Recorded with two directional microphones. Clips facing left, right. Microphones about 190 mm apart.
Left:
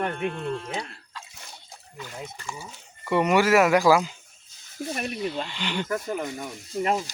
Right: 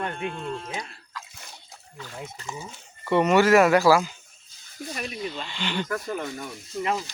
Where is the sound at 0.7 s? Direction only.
25° left (ahead or behind).